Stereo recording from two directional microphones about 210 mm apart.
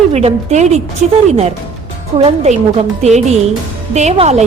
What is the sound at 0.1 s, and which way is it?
A woman's voice, 30° right (ahead or behind).